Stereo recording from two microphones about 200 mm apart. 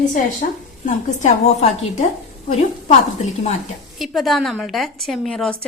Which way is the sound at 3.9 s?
Centre (ahead or behind).